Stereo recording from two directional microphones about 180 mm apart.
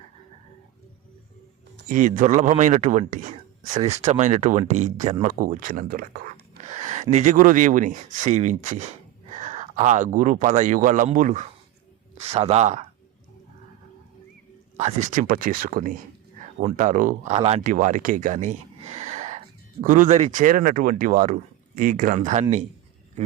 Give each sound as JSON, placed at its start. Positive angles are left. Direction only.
{"t": 1.9, "sound": "speech", "side_deg": -45}
{"t": 6.6, "sound": "speech", "side_deg": -40}
{"t": 12.2, "sound": "speech", "side_deg": -35}
{"t": 14.8, "sound": "speech", "side_deg": -40}